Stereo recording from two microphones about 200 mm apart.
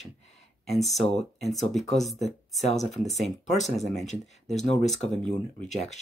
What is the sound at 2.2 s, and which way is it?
Speech, 35° left (ahead or behind).